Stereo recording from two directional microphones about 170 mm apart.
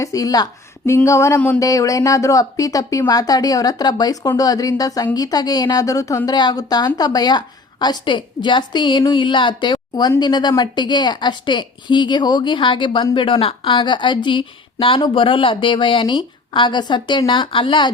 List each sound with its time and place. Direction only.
0.0 s a woman's voice: 20° left (ahead or behind)